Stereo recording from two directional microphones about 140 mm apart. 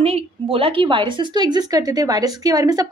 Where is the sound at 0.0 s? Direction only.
45° right (ahead or behind).